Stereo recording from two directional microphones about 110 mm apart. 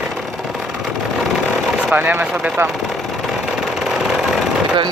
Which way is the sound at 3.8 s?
5° right (ahead or behind).